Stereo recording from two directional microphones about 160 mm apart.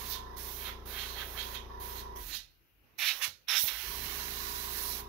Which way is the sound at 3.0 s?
Centre (ahead or behind).